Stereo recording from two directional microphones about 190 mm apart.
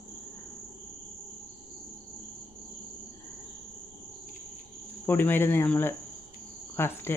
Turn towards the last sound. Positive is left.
turn(degrees=10)  # may be behind; listen again after turning